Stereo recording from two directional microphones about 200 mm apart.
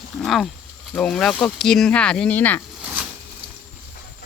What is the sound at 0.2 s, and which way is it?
Speech, centre (ahead or behind).